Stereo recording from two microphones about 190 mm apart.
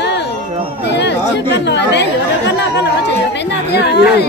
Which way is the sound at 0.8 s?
65° left (ahead or behind).